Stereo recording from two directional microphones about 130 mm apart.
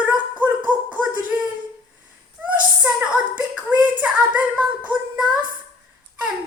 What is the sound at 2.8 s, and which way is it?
Female singing, 10° right (ahead or behind).